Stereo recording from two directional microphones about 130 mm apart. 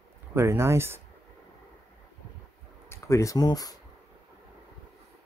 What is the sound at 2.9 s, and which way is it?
Speech, 25° left (ahead or behind).